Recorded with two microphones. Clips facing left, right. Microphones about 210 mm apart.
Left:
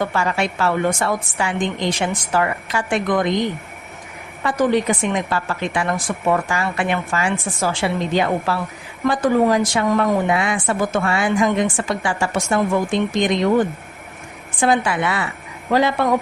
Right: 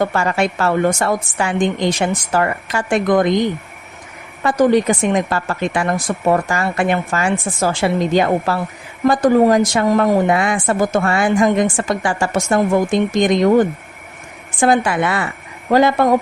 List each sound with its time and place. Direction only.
0.0 s a woman's voice: 45° right (ahead or behind)
4.4 s a woman's voice: 45° right (ahead or behind)